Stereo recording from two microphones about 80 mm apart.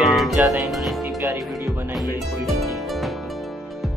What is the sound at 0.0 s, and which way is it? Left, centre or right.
Music, centre.